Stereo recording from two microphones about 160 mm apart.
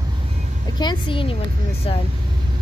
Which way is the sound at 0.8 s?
30° left (ahead or behind).